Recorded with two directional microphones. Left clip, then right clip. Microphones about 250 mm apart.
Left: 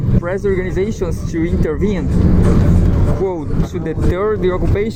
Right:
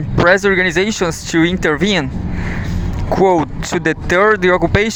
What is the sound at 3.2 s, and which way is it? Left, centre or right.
Speech, right.